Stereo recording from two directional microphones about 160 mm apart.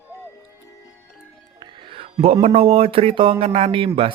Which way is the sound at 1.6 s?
35° right (ahead or behind).